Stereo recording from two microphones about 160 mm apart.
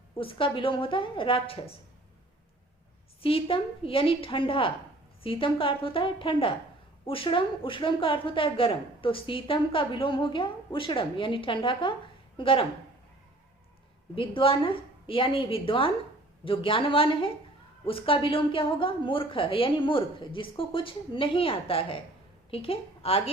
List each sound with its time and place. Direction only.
0.2 s a woman's voice: 35° left (ahead or behind)
3.2 s a woman's voice: 35° left (ahead or behind)
14.2 s a woman's voice: 35° left (ahead or behind)